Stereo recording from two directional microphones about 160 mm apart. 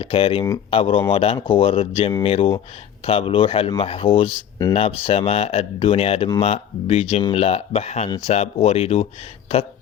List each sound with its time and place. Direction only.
0.0 s speech: 35° left (ahead or behind)